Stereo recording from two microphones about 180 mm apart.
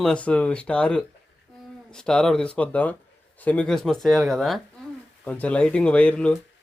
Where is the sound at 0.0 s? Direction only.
5° left (ahead or behind).